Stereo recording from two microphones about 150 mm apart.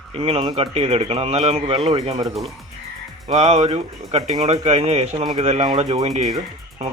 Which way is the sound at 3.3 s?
45° right (ahead or behind).